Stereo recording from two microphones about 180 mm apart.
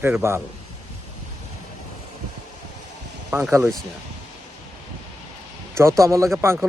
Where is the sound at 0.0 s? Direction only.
15° right (ahead or behind).